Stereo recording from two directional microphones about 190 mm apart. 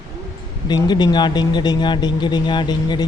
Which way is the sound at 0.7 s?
20° left (ahead or behind).